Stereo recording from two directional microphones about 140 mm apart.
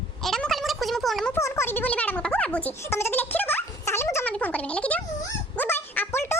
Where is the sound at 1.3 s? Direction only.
20° left (ahead or behind).